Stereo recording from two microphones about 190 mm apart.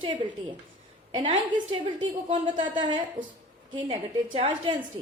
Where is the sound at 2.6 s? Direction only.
25° right (ahead or behind).